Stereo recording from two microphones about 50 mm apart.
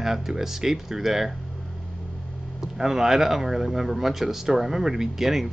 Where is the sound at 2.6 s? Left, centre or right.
Centre.